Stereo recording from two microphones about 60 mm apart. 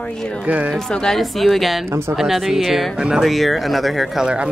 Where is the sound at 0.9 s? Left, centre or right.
Centre.